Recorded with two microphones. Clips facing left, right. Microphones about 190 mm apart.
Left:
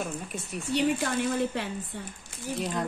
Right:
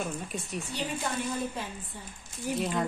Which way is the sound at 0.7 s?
75° left (ahead or behind).